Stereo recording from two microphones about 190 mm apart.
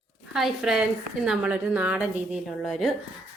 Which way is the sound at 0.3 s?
Centre (ahead or behind).